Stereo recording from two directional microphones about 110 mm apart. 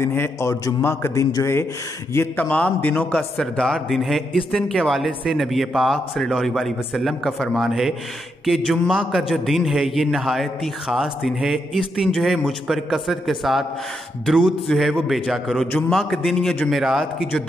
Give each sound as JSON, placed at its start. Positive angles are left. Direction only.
{"t": 0.0, "sound": "a man's voice", "side_deg": 20}
{"t": 2.1, "sound": "a man's voice", "side_deg": 15}
{"t": 3.2, "sound": "speech", "side_deg": 0}